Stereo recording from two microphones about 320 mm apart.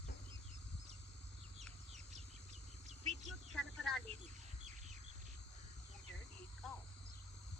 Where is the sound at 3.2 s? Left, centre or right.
Centre.